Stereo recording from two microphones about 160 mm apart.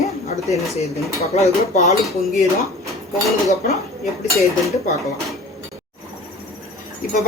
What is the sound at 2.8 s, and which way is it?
Dishes, centre (ahead or behind).